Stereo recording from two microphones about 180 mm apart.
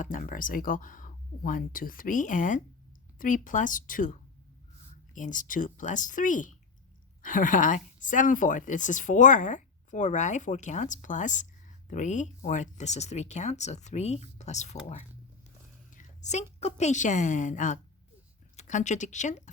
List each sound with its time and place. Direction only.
0.0 s speech: 50° left (ahead or behind)
15.9 s a woman's voice: 40° left (ahead or behind)